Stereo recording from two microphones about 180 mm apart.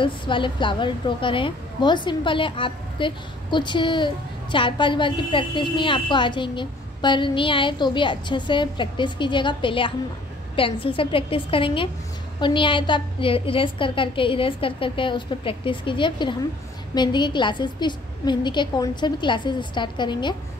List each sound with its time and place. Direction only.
0.0 s a woman's voice: 25° left (ahead or behind)